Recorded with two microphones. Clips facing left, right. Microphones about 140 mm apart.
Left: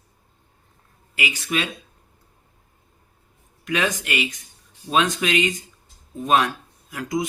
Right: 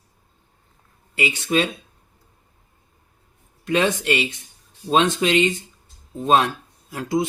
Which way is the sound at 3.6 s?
30° right (ahead or behind).